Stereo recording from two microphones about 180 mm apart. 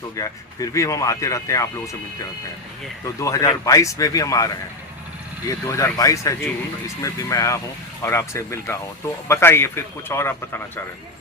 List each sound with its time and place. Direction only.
0.2 s speech: 15° left (ahead or behind)
3.2 s speech: 15° left (ahead or behind)
5.5 s speech: 15° left (ahead or behind)